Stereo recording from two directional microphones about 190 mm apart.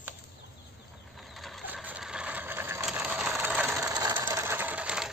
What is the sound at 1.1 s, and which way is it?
Vehicle, centre (ahead or behind).